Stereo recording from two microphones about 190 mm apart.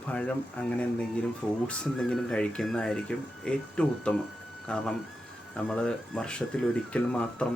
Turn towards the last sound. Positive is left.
turn(degrees=5)  # may be behind; listen again after turning